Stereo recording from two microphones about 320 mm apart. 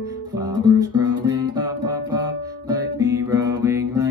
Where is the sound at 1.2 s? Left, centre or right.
Centre.